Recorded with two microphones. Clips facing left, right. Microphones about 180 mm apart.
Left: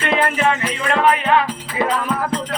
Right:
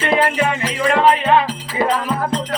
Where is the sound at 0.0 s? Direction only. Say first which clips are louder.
Right 1 dB; 25° right (ahead or behind).